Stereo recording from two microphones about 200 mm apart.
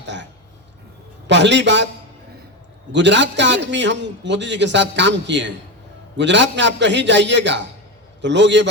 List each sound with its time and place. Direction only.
0.0 s a sound: 60° right (ahead or behind)
1.3 s a man's voice: 60° right (ahead or behind)
2.9 s a man's voice: 65° right (ahead or behind)